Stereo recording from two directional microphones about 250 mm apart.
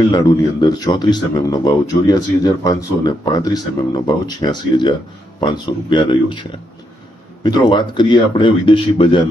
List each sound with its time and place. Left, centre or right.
0.1 s a man's voice: centre
7.4 s speech: centre